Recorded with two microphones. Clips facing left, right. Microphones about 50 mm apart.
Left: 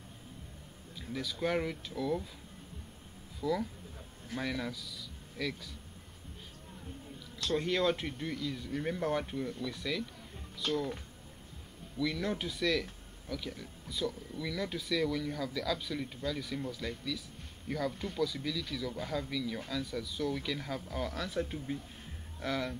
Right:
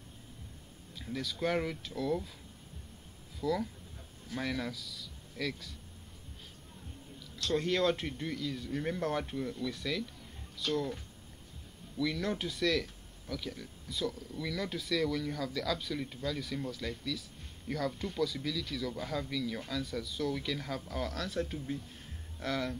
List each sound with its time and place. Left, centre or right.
0.9 s speech: centre
3.3 s speech: centre
7.4 s speech: centre
12.0 s speech: centre